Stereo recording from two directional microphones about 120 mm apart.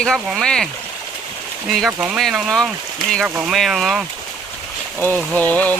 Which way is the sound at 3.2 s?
15° right (ahead or behind).